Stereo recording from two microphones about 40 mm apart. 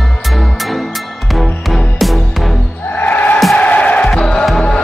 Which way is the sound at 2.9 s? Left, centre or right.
Left.